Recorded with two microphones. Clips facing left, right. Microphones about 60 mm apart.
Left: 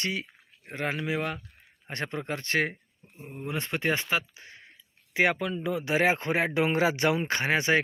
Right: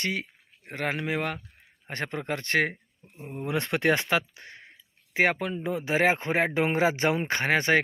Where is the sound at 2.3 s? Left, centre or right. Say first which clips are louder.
Right 3 dB; right.